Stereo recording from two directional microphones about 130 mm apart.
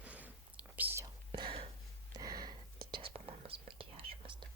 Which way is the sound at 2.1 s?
30° right (ahead or behind).